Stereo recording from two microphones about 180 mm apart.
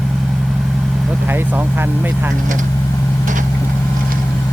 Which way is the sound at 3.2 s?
45° right (ahead or behind).